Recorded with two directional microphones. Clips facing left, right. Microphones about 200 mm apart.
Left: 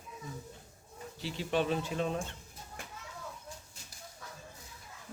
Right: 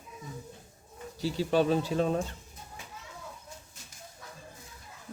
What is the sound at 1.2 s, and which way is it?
A man's voice, 40° right (ahead or behind).